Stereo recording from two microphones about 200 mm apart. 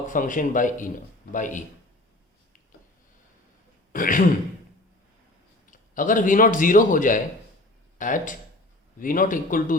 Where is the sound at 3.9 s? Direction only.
45° left (ahead or behind).